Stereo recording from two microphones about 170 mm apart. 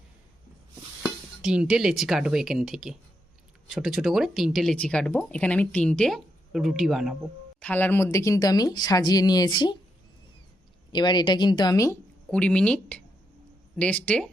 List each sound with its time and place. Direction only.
1.0 s speech: 5° right (ahead or behind)
7.6 s speech: 10° left (ahead or behind)
10.9 s speech: 25° left (ahead or behind)
12.3 s speech: 5° left (ahead or behind)